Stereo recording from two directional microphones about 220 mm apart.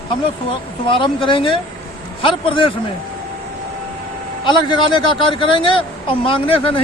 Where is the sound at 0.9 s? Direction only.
20° left (ahead or behind).